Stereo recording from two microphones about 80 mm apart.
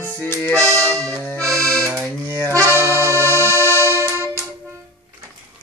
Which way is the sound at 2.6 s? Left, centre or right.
Right.